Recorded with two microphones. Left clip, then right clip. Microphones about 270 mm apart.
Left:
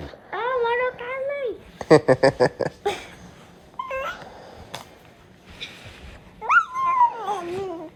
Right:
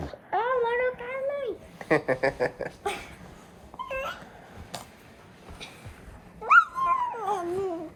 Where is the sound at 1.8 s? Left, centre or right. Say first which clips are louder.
Left 9 dB; left.